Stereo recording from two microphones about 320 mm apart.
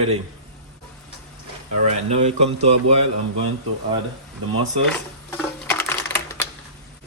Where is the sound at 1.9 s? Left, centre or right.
Centre.